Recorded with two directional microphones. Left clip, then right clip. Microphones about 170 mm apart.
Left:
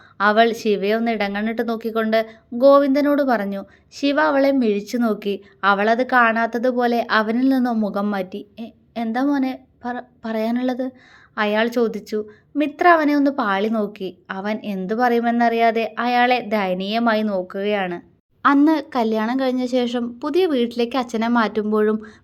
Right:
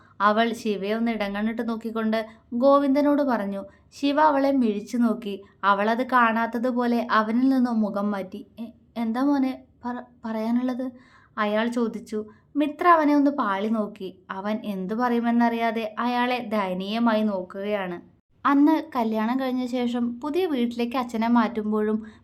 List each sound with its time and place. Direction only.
0.2 s a woman's voice: 20° left (ahead or behind)